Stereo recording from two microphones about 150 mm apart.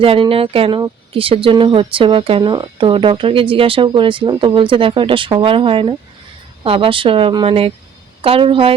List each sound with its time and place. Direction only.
0.0 s speech: 40° right (ahead or behind)